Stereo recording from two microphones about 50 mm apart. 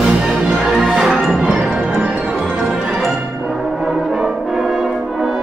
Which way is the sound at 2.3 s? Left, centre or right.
Centre.